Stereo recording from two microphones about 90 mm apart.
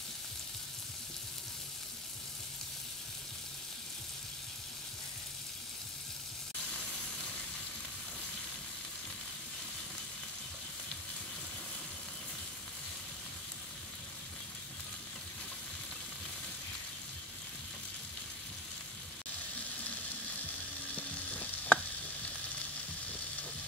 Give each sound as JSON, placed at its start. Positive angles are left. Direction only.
{"t": 20.9, "sound": "frying", "side_deg": 15}